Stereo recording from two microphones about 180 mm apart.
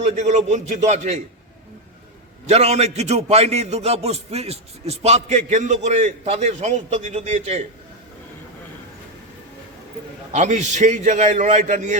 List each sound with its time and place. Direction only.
0.0 s a man's voice: 40° right (ahead or behind)
2.5 s a man's voice: 35° right (ahead or behind)
10.3 s a man's voice: 40° right (ahead or behind)